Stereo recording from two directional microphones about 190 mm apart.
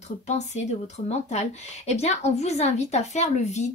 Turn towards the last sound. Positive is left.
turn(degrees=35)  # may be behind; listen again after turning